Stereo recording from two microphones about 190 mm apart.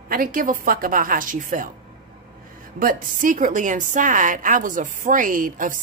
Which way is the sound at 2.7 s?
45° right (ahead or behind).